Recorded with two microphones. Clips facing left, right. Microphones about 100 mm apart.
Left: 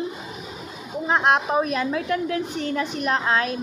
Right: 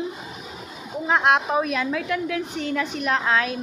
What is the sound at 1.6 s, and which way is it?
A woman's voice, 35° left (ahead or behind).